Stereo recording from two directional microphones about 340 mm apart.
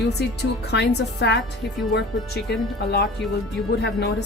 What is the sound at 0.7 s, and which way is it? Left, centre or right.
Speech, left.